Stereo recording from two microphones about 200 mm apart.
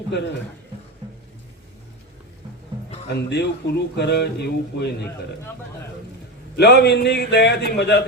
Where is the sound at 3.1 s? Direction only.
55° left (ahead or behind).